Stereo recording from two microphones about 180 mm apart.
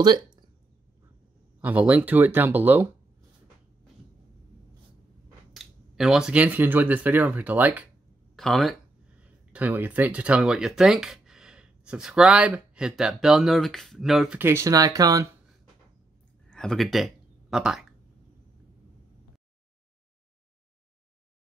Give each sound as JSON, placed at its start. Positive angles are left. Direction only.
{"t": 1.6, "sound": "speech", "side_deg": -10}
{"t": 5.5, "sound": "speech", "side_deg": 0}
{"t": 8.4, "sound": "speech", "side_deg": 0}
{"t": 9.5, "sound": "speech", "side_deg": -10}
{"t": 14.4, "sound": "speech", "side_deg": -15}
{"t": 16.4, "sound": "a sound", "side_deg": 5}